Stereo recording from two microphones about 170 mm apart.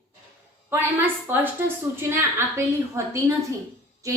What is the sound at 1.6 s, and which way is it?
A woman's voice, 15° right (ahead or behind).